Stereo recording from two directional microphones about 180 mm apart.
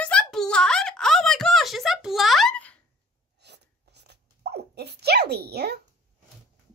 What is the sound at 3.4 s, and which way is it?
Dog, 70° right (ahead or behind).